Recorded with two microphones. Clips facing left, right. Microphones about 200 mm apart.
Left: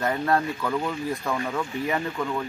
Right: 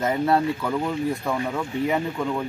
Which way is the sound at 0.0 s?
20° right (ahead or behind).